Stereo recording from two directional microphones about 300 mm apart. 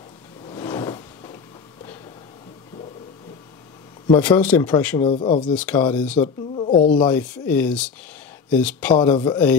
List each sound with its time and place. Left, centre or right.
0.5 s a sound: centre
4.2 s speech: centre
5.1 s speech: left
5.4 s speech: centre
6.2 s speech: centre
7.1 s speech: centre